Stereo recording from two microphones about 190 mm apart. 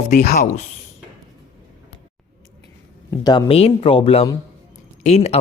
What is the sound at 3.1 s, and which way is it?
A woman's voice, 20° left (ahead or behind).